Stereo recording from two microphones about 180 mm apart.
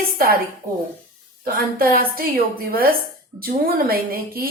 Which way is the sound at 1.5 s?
55° right (ahead or behind).